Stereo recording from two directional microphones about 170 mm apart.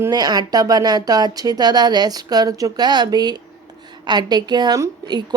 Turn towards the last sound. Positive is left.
turn(degrees=-25)  # may be behind; listen again after turning